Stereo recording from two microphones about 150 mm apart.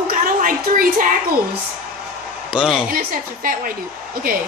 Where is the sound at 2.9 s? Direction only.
70° right (ahead or behind).